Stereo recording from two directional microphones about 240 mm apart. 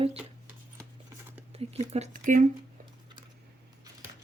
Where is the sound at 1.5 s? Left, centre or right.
Right.